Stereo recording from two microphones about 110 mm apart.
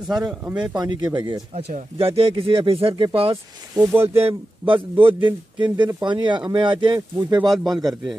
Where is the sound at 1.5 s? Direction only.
70° right (ahead or behind).